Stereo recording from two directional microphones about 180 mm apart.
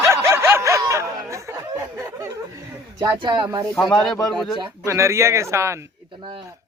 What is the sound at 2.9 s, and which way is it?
Speech, 25° right (ahead or behind).